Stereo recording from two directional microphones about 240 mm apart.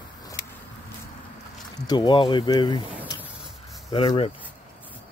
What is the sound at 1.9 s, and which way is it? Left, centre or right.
Speech, centre.